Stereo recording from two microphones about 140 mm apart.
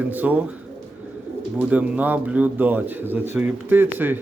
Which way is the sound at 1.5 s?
10° right (ahead or behind).